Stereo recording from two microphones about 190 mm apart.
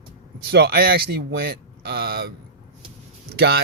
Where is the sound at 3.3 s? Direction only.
55° right (ahead or behind).